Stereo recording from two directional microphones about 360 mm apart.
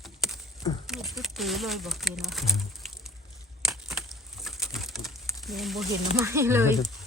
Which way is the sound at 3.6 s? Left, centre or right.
Centre.